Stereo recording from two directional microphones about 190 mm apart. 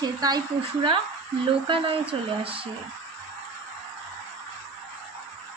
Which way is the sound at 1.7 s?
25° right (ahead or behind).